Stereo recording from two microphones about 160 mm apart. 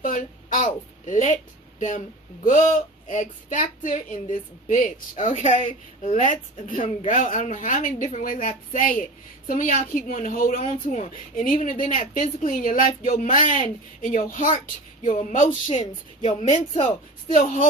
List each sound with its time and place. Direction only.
0.0 s a sound: 55° left (ahead or behind)
3.1 s a woman's voice: 50° left (ahead or behind)
17.3 s a woman's voice: 50° left (ahead or behind)